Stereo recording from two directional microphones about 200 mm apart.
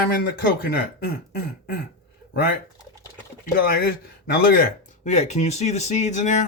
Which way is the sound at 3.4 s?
50° left (ahead or behind).